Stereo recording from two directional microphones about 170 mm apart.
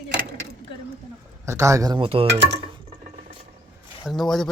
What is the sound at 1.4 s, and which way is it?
Speech, 15° right (ahead or behind).